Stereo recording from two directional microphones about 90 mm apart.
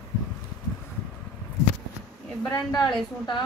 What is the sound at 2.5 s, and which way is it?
Speech, 45° left (ahead or behind).